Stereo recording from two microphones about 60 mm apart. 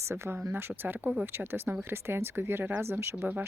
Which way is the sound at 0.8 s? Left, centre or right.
Right.